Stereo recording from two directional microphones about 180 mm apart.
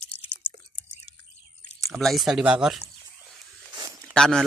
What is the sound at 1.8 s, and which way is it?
Speech, centre (ahead or behind).